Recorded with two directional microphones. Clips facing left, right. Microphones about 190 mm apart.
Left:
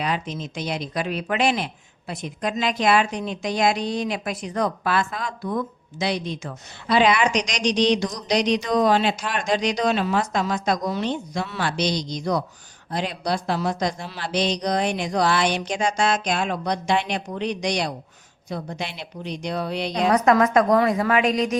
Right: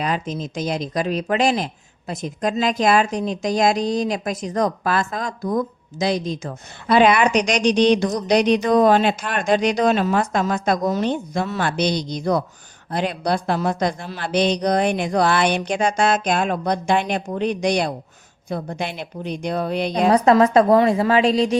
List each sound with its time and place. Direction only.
0.0 s speech: 45° right (ahead or behind)
6.8 s speech: 55° right (ahead or behind)
20.1 s a woman's voice: 30° right (ahead or behind)